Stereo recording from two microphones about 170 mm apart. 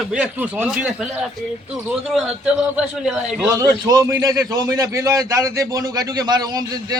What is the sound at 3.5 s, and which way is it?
A man's voice, 20° right (ahead or behind).